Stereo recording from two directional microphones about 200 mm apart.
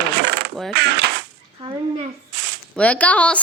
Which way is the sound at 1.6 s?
25° right (ahead or behind).